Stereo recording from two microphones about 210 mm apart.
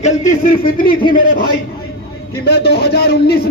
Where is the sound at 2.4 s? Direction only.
50° left (ahead or behind).